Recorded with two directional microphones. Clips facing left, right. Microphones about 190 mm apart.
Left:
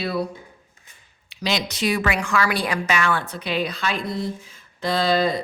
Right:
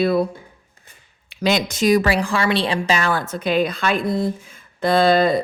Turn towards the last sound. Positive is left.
turn(degrees=-55)  # may be behind; listen again after turning